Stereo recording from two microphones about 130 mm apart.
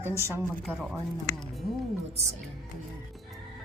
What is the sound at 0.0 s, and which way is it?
Speech, 20° right (ahead or behind).